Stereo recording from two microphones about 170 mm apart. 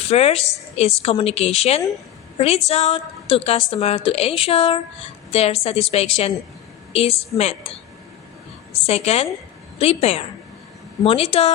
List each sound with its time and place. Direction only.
0.1 s a woman's voice: 35° left (ahead or behind)
8.9 s a woman's voice: 40° left (ahead or behind)